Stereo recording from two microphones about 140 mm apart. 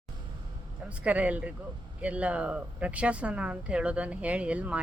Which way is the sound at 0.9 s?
10° right (ahead or behind).